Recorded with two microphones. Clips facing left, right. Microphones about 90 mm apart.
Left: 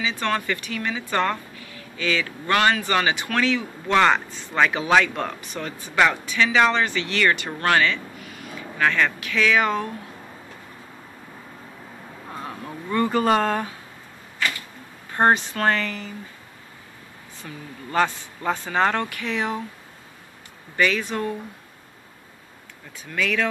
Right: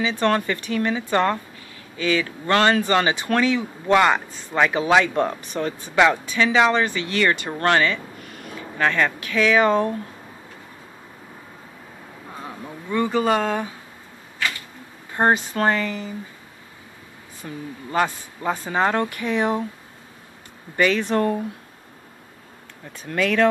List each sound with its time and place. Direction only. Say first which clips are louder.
0.2 s a woman's voice: right 5 dB; 30° right (ahead or behind); by 4.6 s 15° right (ahead or behind)
4.6 s speech: right 2 dB; 25° right (ahead or behind)
5.9 s speech: right 2 dB; 20° right (ahead or behind)
8.2 s a sound: right 1 dB; 50° right (ahead or behind)
8.8 s speech: right 1 dB; 25° right (ahead or behind)
12.4 s speech: even; 5° right (ahead or behind)
15.5 s a man's voice: right 2 dB; 15° right (ahead or behind)
17.4 s a man's voice: right 4 dB; 20° right (ahead or behind)
20.7 s speech: right 3 dB; 30° right (ahead or behind)
23.0 s speech: right 4 dB; 45° right (ahead or behind)